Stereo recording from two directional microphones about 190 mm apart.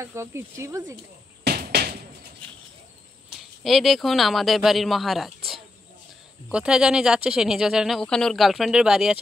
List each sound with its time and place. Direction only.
0.0 s speech: 15° right (ahead or behind)
1.4 s a sound: 55° right (ahead or behind)
3.6 s speech: centre (ahead or behind)